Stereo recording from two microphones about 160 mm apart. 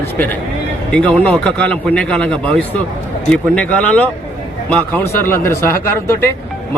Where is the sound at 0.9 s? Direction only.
5° left (ahead or behind).